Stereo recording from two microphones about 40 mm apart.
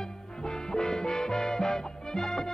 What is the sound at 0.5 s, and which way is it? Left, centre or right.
Music, centre.